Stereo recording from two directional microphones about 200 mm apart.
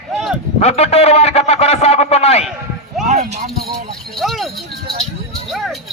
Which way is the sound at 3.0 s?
35° right (ahead or behind).